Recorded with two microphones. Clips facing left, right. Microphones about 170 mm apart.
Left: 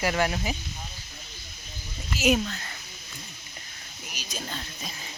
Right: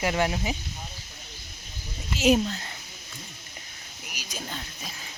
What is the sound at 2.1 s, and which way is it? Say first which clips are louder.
Speech: right 2 dB; 30° right (ahead or behind).